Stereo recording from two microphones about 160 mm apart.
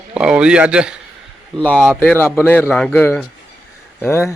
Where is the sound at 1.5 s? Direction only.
5° left (ahead or behind).